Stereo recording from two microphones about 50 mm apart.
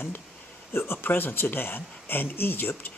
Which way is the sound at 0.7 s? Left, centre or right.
Left.